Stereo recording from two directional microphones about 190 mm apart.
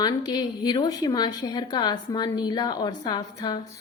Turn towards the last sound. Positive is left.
turn(degrees=20)  # may be behind; listen again after turning